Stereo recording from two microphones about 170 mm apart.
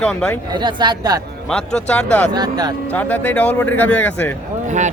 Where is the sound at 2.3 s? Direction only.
25° right (ahead or behind).